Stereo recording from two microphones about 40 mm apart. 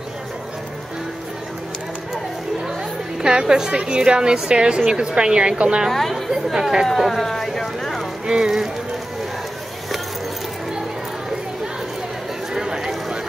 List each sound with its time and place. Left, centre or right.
3.2 s a woman's voice: centre
5.9 s a woman's voice: centre
6.3 s speech: centre
7.0 s a sound: centre
8.3 s a woman's voice: centre
12.5 s a sound: centre